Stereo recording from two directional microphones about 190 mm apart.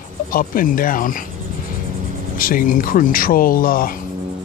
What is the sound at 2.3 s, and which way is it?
Speech, 50° left (ahead or behind).